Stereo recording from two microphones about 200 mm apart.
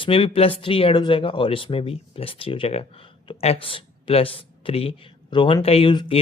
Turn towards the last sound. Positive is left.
turn(degrees=25)  # may be behind; listen again after turning